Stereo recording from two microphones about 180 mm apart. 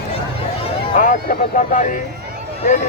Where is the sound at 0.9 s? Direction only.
45° left (ahead or behind).